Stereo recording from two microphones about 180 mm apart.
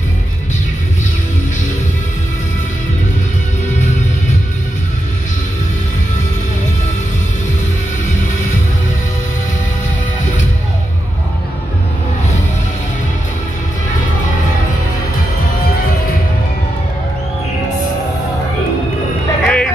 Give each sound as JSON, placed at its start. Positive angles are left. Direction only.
{"t": 19.4, "sound": "music", "side_deg": 5}